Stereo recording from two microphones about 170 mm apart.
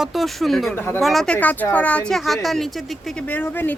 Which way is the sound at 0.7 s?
15° left (ahead or behind).